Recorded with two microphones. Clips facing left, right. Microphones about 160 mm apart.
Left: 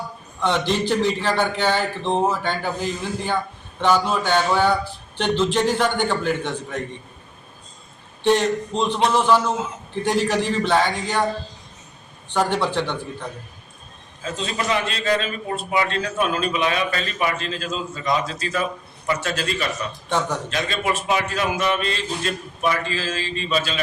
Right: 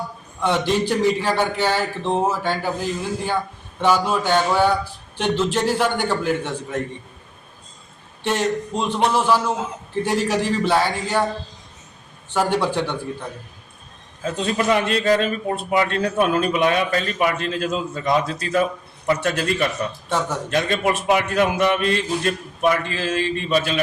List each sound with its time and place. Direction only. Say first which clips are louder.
0.3 s a man's voice: right 1 dB; 10° right (ahead or behind)
8.2 s a man's voice: left 3 dB; 5° right (ahead or behind)
12.3 s a man's voice: right 1 dB; 5° right (ahead or behind)
14.3 s a man's voice: right 4 dB; 55° right (ahead or behind)
15.0 s a man's voice: right 4 dB; 40° right (ahead or behind); by 23.8 s 55° right (ahead or behind)